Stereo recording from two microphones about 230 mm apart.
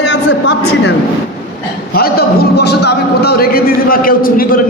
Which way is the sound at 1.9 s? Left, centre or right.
Left.